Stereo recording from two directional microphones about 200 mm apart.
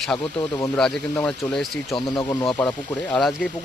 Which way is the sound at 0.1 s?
Centre (ahead or behind).